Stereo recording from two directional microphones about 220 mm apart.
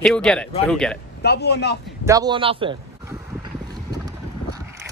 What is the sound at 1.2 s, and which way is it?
Speech, 50° left (ahead or behind).